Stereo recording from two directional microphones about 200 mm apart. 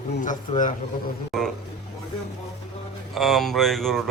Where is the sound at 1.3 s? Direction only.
Centre (ahead or behind).